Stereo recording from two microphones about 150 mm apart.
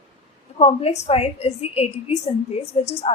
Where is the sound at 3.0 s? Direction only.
40° left (ahead or behind).